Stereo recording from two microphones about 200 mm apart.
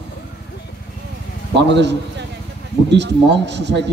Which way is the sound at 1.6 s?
60° right (ahead or behind).